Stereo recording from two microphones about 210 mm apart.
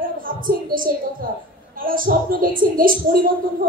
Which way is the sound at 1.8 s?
40° right (ahead or behind).